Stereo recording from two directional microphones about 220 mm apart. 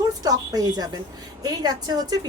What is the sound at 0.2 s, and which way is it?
A woman's voice, 15° right (ahead or behind).